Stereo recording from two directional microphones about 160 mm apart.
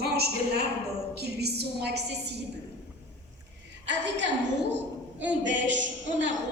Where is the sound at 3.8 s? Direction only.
90° right.